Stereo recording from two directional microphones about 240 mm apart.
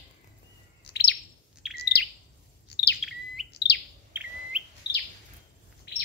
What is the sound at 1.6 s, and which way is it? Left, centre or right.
Chirp, centre.